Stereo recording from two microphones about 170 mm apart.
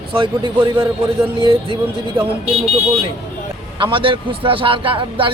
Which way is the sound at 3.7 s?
30° right (ahead or behind).